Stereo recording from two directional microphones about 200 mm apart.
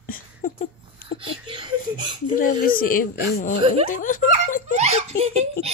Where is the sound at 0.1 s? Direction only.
40° left (ahead or behind).